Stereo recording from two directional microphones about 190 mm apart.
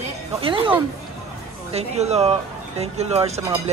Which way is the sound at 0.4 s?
25° right (ahead or behind).